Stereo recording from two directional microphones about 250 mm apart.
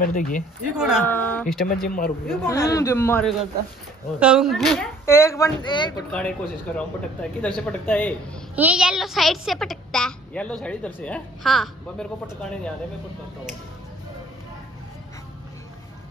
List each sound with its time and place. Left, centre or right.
0.0 s a man's voice: left
0.7 s a child's voice: centre
1.8 s a man's voice: left
2.4 s speech: centre
6.1 s a child's voice: centre
8.5 s a child's voice: centre